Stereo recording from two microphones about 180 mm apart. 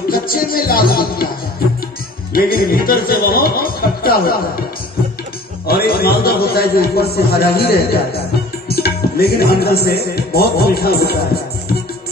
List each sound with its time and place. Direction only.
0.1 s speech: 55° left (ahead or behind)
2.3 s a man's voice: 55° left (ahead or behind)
5.7 s a man's voice: 60° left (ahead or behind)
8.6 s tabla: 60° left (ahead or behind)